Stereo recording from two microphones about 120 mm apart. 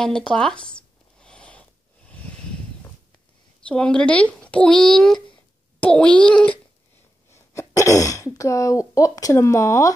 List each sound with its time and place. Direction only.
0.0 s a sound: 5° left (ahead or behind)
3.6 s speech: 10° left (ahead or behind)
7.2 s speech: 25° left (ahead or behind)